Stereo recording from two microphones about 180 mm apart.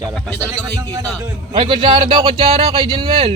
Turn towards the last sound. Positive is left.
turn(degrees=-30)  # may be behind; listen again after turning